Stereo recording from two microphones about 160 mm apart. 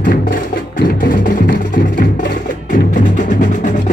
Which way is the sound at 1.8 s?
90° left.